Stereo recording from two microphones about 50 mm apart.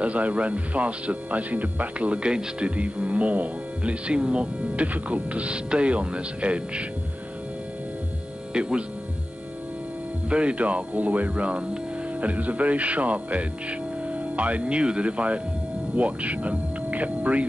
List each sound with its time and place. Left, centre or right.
0.0 s speech: right
8.5 s speech: centre
10.3 s speech: right